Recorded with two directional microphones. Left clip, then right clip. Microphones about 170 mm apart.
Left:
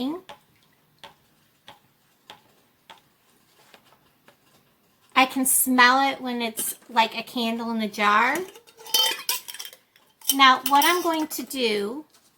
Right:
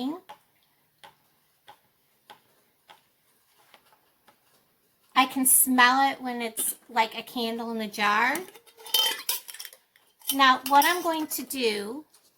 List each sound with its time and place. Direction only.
2.3 s tick-tock: 5° right (ahead or behind)
5.1 s speech: 30° right (ahead or behind)
8.5 s cutlery: 25° right (ahead or behind)
10.3 s speech: 35° right (ahead or behind)